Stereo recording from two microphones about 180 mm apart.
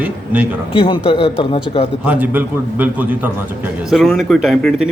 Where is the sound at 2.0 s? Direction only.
10° right (ahead or behind).